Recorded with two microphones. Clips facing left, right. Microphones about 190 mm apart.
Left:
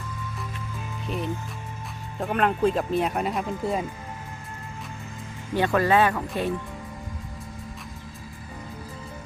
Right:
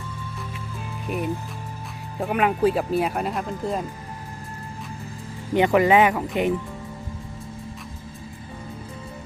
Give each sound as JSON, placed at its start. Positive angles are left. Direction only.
{"t": 1.0, "sound": "speech", "side_deg": -10}
{"t": 5.5, "sound": "speech", "side_deg": -15}